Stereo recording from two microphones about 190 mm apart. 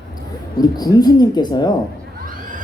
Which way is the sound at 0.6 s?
20° left (ahead or behind).